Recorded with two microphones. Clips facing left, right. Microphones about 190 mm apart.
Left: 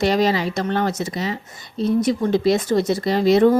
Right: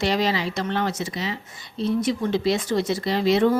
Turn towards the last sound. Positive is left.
turn(degrees=40)  # may be behind; listen again after turning